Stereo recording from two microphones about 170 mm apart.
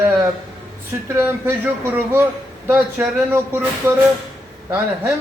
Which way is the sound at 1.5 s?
10° right (ahead or behind).